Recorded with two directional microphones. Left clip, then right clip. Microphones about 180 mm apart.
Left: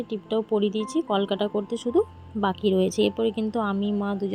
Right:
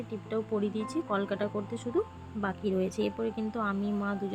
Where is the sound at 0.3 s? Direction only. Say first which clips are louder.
Left 8 dB; 20° left (ahead or behind).